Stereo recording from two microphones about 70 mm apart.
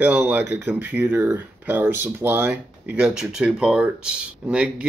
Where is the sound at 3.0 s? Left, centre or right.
Centre.